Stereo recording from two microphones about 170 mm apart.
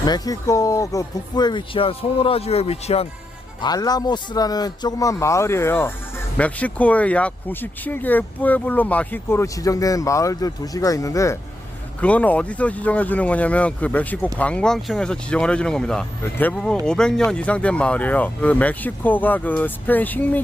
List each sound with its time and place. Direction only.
0.0 s speech: 20° left (ahead or behind)
3.6 s speech: 25° left (ahead or behind)
11.9 s speech: 10° left (ahead or behind)